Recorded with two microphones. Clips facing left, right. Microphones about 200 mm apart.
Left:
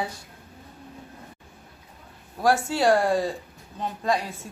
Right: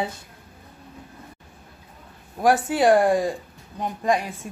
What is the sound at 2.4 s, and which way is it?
Speech, 20° right (ahead or behind).